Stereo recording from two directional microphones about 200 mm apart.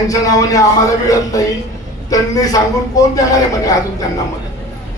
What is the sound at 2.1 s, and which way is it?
A man's voice, 20° left (ahead or behind).